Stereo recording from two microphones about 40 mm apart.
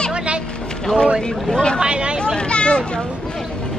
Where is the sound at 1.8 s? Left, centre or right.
Right.